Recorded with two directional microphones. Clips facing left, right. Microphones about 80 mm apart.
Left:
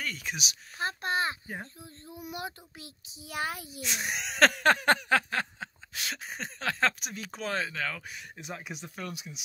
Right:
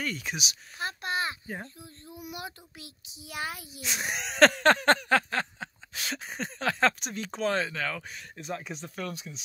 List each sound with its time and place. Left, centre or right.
0.0 s speech: centre
0.7 s a sound: left
1.8 s child singing: left
3.8 s speech: centre